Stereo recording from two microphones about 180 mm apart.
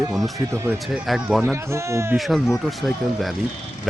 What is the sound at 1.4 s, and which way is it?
Speech, 15° right (ahead or behind).